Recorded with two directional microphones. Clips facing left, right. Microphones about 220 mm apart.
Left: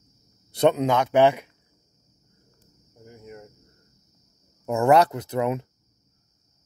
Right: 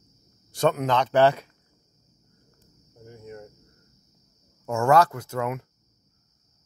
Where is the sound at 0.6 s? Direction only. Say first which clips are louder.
Left 3 dB; 20° left (ahead or behind).